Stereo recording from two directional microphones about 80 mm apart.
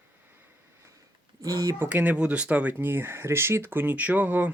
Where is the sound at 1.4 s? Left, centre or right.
Right.